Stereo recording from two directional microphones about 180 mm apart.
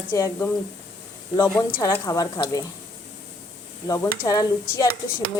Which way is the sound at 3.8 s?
20° left (ahead or behind).